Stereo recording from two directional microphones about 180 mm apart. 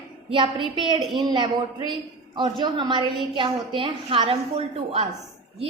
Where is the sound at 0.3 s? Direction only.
30° right (ahead or behind).